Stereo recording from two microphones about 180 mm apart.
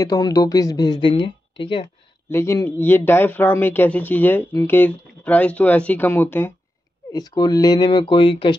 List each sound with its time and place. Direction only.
0.0 s speech: 20° left (ahead or behind)
2.2 s speech: 15° left (ahead or behind)
7.1 s speech: 20° left (ahead or behind)